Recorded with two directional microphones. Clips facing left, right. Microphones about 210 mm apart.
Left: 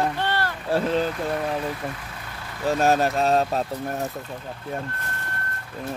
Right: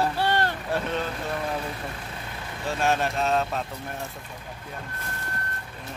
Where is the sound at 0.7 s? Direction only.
30° left (ahead or behind).